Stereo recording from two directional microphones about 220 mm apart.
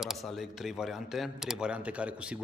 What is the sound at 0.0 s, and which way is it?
A man's voice, centre (ahead or behind).